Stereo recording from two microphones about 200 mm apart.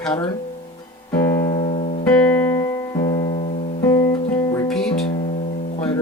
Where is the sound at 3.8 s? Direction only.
15° left (ahead or behind).